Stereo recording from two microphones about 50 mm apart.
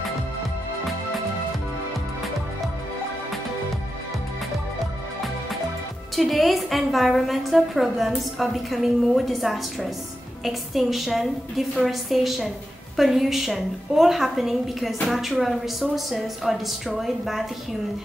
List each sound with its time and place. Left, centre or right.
6.1 s a woman's voice: centre